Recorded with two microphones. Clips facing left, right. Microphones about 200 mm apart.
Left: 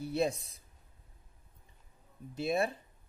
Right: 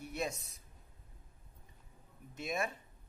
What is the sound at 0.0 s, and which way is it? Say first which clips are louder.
Speech: left 8 dB; 30° left (ahead or behind).